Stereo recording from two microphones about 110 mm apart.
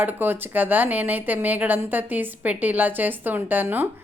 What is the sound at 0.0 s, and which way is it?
Speech, 20° right (ahead or behind).